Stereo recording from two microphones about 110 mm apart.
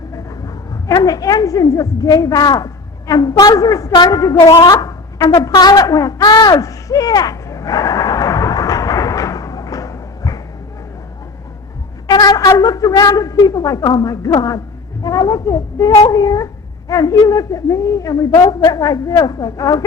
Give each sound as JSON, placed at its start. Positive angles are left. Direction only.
{"t": 0.4, "sound": "a woman's voice", "side_deg": 30}
{"t": 4.7, "sound": "a sound", "side_deg": 30}
{"t": 12.0, "sound": "speech", "side_deg": 40}